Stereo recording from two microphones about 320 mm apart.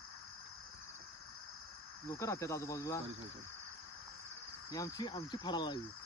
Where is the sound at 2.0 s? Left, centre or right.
Centre.